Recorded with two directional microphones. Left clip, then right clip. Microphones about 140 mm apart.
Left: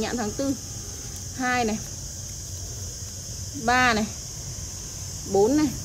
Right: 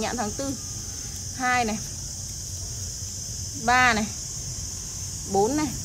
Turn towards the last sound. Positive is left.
turn(degrees=5)  # may be behind; listen again after turning